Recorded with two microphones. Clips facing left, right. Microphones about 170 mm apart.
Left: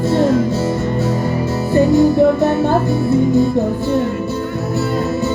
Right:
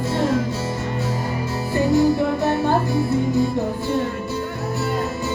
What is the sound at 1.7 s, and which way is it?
Music, 25° left (ahead or behind).